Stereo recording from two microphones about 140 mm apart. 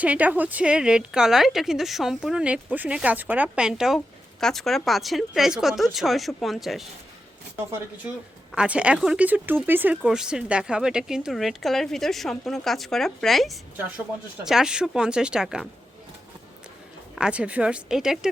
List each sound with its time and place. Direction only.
0.0 s a woman's voice: 10° right (ahead or behind)
7.5 s a woman's voice: 15° right (ahead or behind)
17.2 s a woman's voice: 5° right (ahead or behind)